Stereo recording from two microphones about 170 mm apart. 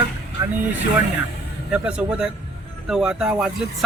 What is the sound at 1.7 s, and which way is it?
Speech, 5° right (ahead or behind).